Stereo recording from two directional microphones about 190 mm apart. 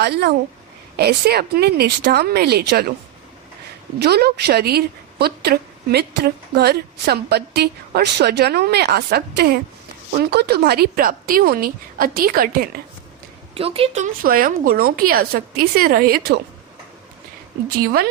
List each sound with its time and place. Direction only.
0.0 s a woman's voice: 60° right (ahead or behind)
4.0 s a woman's voice: 60° right (ahead or behind)
13.5 s a woman's voice: 30° right (ahead or behind); by 16.4 s 55° right (ahead or behind)